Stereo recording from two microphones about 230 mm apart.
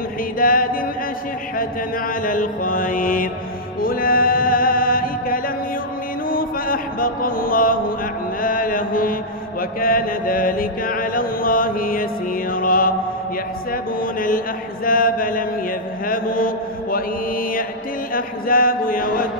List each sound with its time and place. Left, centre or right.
0.4 s a sound: left
1.6 s mantra: left
3.8 s music: left
6.2 s mantra: left